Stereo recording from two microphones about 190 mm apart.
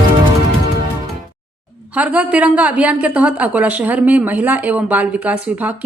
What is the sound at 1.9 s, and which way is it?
A woman's voice, 10° right (ahead or behind).